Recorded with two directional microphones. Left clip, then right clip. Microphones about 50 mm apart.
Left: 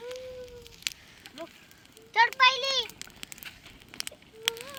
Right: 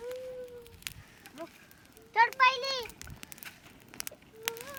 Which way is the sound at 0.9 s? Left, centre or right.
Right.